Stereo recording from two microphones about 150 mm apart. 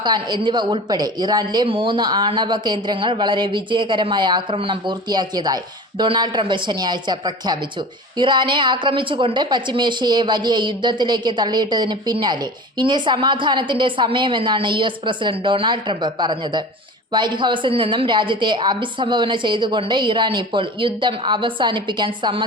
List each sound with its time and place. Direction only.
0.0 s a woman's voice: 30° right (ahead or behind)